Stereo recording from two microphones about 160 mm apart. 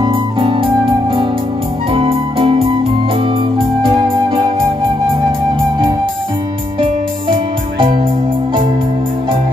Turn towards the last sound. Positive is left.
turn(degrees=-35)  # may be behind; listen again after turning